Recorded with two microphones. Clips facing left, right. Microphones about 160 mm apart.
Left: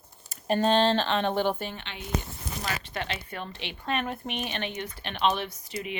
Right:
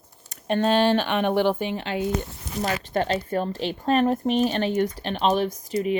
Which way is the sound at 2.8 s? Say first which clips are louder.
Right 10 dB; 45° right (ahead or behind).